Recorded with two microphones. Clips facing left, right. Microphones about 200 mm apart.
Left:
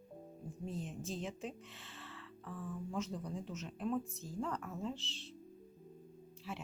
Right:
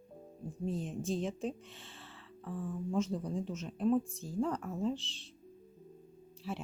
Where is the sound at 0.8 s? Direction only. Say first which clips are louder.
Right 6 dB; 30° right (ahead or behind).